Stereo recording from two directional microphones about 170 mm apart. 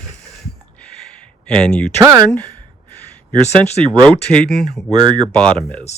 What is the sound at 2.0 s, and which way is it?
Speech, 15° right (ahead or behind).